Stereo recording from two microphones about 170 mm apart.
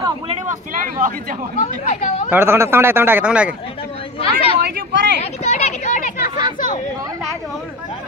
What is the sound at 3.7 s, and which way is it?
Chatter, 35° left (ahead or behind).